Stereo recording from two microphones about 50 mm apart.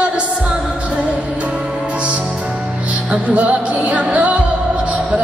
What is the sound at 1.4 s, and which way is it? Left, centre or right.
Music, right.